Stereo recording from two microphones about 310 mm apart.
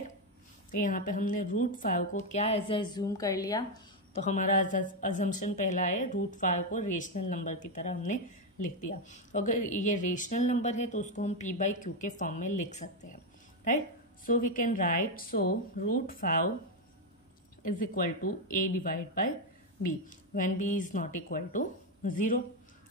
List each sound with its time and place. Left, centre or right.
0.7 s speech: left
4.1 s speech: left
14.2 s speech: left
17.6 s speech: left